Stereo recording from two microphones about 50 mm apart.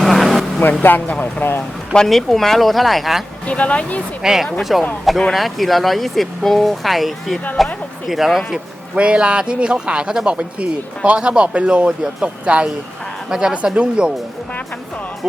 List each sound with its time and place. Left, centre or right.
0.0 s vehicle: centre
0.8 s speech: left
1.9 s speech: centre
3.4 s speech: left
4.2 s speech: centre
9.0 s speech: centre